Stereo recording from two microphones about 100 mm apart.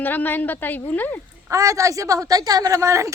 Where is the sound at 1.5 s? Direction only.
30° right (ahead or behind).